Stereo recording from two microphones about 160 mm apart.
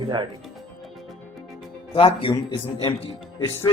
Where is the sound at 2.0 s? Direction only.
35° left (ahead or behind).